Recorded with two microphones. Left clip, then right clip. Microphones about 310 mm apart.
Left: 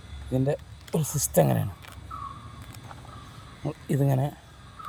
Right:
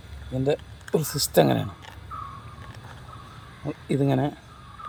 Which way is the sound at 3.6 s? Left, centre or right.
Left.